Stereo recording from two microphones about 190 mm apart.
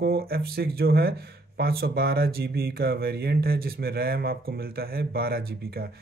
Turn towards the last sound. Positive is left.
turn(degrees=-55)  # may be behind; listen again after turning